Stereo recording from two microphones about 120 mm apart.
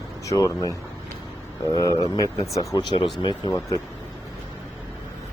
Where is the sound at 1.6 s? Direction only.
30° left (ahead or behind).